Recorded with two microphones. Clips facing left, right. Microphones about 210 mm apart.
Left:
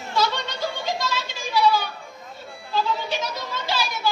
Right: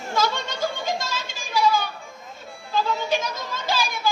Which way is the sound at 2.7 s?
45° right (ahead or behind).